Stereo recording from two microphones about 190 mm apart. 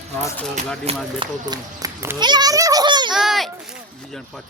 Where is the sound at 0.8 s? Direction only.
30° right (ahead or behind).